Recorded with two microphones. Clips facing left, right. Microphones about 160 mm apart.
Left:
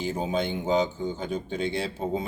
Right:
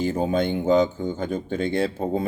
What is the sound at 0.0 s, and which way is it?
Speech, 55° right (ahead or behind).